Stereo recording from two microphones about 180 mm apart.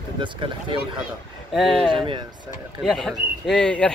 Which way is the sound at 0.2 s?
30° right (ahead or behind).